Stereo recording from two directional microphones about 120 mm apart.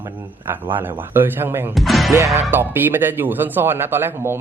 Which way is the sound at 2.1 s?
25° right (ahead or behind).